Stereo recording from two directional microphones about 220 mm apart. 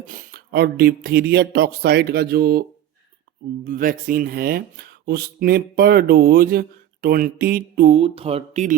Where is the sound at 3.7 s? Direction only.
40° right (ahead or behind).